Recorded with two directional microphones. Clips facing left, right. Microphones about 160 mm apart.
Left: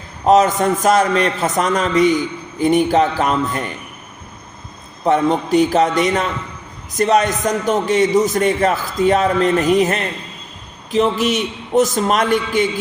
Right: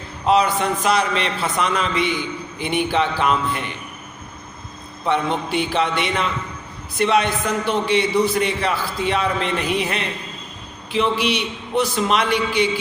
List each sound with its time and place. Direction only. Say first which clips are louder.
0.3 s a man's voice: left 5 dB; 45° left (ahead or behind)
5.0 s a man's voice: left 6 dB; 40° left (ahead or behind)